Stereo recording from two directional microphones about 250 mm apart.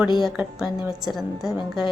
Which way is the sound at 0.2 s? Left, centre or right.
Centre.